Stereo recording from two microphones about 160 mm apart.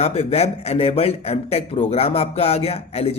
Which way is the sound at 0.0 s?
40° left (ahead or behind).